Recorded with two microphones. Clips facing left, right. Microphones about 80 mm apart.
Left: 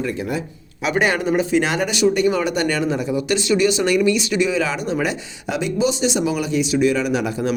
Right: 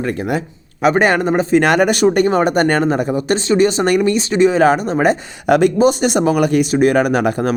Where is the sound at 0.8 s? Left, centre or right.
Right.